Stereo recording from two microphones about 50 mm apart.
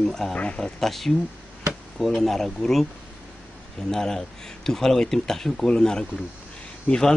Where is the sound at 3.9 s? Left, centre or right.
Centre.